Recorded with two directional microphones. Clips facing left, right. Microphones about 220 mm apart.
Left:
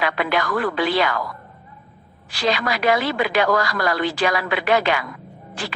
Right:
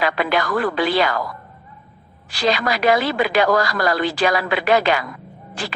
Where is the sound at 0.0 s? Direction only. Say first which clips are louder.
Right 2 dB; 35° right (ahead or behind).